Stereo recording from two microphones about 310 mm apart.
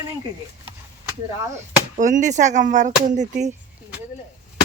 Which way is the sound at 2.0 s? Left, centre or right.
Right.